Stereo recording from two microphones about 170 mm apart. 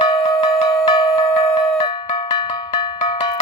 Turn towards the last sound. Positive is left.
turn(degrees=30)  # may be behind; listen again after turning